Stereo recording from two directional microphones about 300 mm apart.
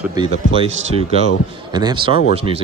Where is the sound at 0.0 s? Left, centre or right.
Centre.